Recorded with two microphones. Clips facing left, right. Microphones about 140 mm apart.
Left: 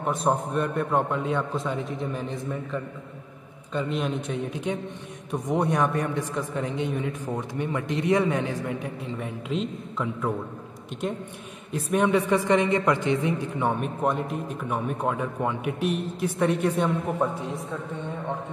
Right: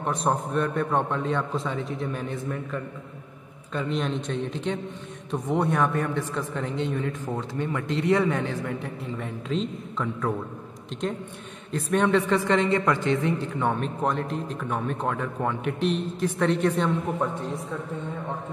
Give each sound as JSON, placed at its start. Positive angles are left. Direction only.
{"t": 0.0, "sound": "a man's voice", "side_deg": 0}
{"t": 3.7, "sound": "a woman's voice", "side_deg": 5}
{"t": 9.5, "sound": "a woman's voice", "side_deg": 5}
{"t": 11.7, "sound": "a woman's voice", "side_deg": 10}